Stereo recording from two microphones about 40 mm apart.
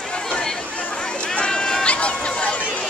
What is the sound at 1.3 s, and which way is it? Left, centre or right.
Run, left.